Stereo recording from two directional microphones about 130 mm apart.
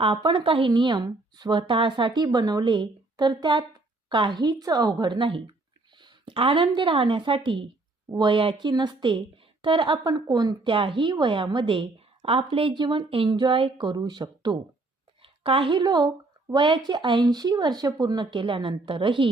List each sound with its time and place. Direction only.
0.0 s speech: 40° right (ahead or behind)
15.2 s speech: 45° right (ahead or behind)